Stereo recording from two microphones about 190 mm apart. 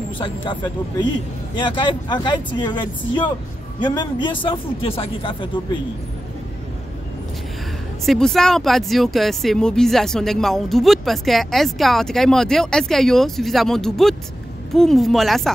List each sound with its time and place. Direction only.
0.2 s speech: 25° left (ahead or behind)
8.0 s speech: centre (ahead or behind)